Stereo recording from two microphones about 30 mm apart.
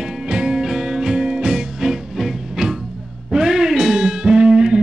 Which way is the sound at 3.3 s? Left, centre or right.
Centre.